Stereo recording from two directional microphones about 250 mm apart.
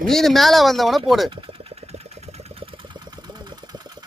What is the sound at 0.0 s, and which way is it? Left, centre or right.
Speech, centre.